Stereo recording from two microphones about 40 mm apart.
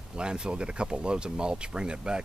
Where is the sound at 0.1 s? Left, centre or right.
Right.